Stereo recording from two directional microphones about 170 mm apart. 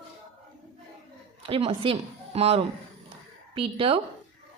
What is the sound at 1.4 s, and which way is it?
A woman's voice, 35° right (ahead or behind).